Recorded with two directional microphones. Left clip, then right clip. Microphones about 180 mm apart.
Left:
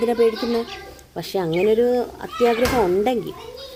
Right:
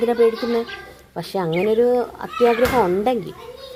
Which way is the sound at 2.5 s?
Centre (ahead or behind).